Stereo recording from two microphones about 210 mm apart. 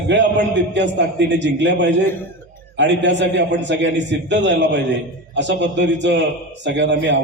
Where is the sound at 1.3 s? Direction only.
55° right (ahead or behind).